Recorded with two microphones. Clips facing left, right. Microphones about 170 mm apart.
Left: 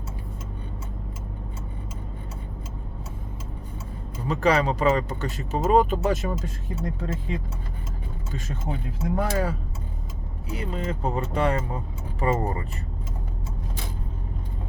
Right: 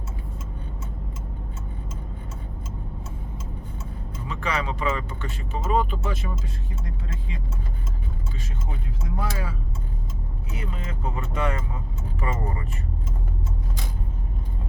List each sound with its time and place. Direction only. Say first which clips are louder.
4.3 s speech: left 7 dB; 35° left (ahead or behind)
9.0 s speech: left 7 dB; 50° left (ahead or behind)
10.5 s speech: left 6 dB; 35° left (ahead or behind)